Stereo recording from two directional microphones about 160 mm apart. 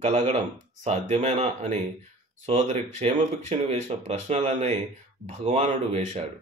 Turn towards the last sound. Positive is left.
turn(degrees=-50)  # may be behind; listen again after turning